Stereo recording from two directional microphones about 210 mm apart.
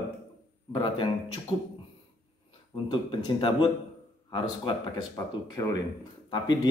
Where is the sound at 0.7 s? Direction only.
20° left (ahead or behind).